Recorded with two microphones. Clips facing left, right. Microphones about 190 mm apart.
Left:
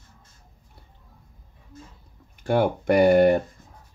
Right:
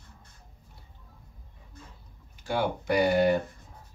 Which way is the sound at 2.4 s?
55° left (ahead or behind).